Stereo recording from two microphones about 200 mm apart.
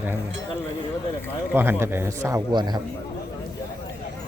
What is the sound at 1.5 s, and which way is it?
A man's voice, 10° right (ahead or behind).